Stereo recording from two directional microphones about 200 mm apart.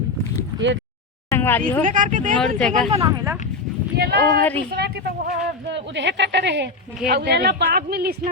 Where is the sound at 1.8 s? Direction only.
40° right (ahead or behind).